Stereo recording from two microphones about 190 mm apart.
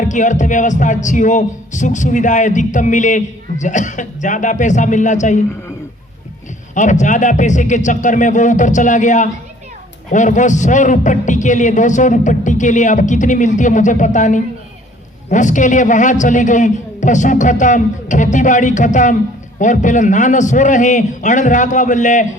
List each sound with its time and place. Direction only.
0.0 s speech: 40° left (ahead or behind)
6.7 s speech: 40° left (ahead or behind)